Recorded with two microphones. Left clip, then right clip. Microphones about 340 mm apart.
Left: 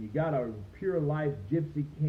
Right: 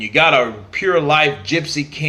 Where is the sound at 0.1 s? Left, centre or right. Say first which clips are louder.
Right 18 dB; right.